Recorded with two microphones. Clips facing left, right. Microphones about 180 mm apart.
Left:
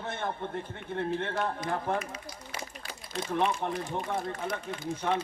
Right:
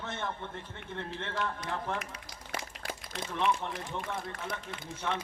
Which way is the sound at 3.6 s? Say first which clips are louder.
Left 5 dB; 50° left (ahead or behind).